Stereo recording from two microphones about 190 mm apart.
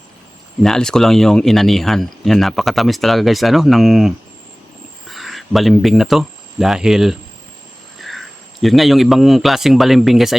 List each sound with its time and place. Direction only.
0.6 s speech: 5° left (ahead or behind)